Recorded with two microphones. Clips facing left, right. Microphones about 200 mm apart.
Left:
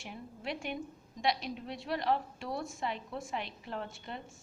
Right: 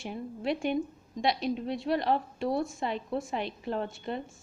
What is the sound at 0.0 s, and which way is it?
A woman's voice, 30° right (ahead or behind).